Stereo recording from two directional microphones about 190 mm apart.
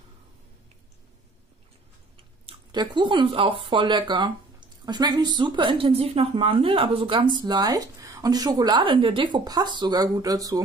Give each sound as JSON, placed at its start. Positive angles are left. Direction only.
{"t": 2.1, "sound": "speech", "side_deg": -25}